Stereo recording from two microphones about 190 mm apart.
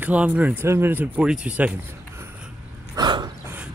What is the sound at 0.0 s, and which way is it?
Speech, 10° right (ahead or behind).